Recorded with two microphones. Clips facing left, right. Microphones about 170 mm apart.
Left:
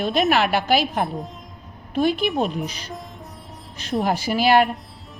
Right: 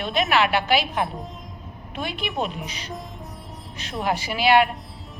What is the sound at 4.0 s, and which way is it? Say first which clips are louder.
Speech: left 2 dB; 40° left (ahead or behind).